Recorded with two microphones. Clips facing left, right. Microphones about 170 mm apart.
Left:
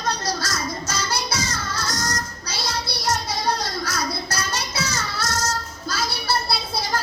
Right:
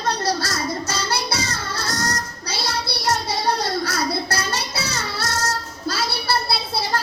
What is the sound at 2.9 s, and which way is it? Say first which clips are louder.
Child singing: right 2 dB; 65° right (ahead or behind).